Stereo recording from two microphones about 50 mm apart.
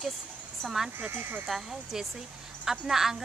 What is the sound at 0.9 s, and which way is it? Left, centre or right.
Speech, right.